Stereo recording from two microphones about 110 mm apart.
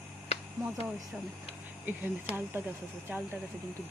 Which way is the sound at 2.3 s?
70° left (ahead or behind).